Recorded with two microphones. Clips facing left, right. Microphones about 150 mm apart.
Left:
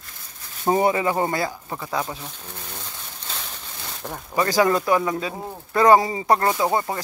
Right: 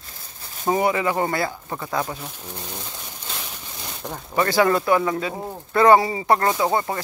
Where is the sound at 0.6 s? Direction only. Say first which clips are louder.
Left 1 dB; 30° left (ahead or behind).